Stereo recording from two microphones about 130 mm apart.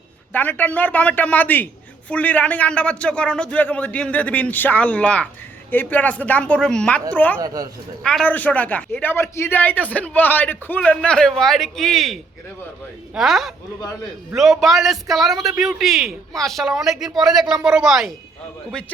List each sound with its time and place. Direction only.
0.3 s a man's voice: 15° left (ahead or behind)
7.4 s speech: 30° right (ahead or behind)
8.0 s a man's voice: 10° left (ahead or behind)